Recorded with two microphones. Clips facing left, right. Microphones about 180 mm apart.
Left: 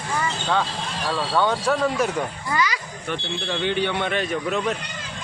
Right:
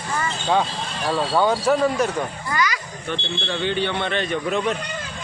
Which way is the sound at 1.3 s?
5° right (ahead or behind).